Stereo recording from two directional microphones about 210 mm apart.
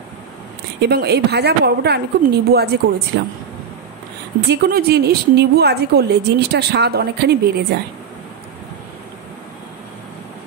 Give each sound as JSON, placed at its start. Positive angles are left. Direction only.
{"t": 0.7, "sound": "a woman's voice", "side_deg": -50}
{"t": 4.5, "sound": "a woman's voice", "side_deg": -50}